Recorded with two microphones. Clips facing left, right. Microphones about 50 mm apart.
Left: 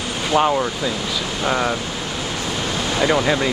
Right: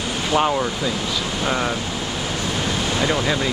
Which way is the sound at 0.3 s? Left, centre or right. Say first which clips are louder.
Left 2 dB; centre.